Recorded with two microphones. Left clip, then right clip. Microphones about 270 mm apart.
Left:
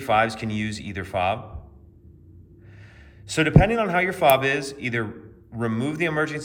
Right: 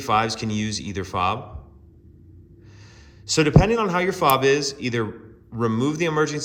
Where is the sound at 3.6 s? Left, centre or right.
Centre.